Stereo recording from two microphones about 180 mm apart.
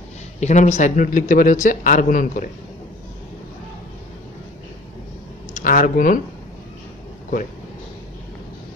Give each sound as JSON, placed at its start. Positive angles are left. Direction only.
{"t": 0.4, "sound": "speech", "side_deg": 40}
{"t": 5.5, "sound": "speech", "side_deg": 50}